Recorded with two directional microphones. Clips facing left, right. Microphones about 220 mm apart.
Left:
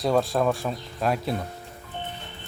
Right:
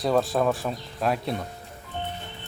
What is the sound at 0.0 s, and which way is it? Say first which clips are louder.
Speech: even; centre (ahead or behind).